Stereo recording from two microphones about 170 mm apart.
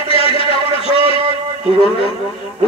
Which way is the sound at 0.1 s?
35° left (ahead or behind).